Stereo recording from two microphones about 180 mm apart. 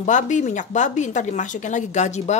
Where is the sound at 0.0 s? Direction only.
45° left (ahead or behind).